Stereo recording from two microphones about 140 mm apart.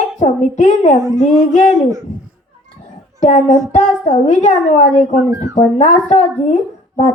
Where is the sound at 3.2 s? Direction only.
60° left (ahead or behind).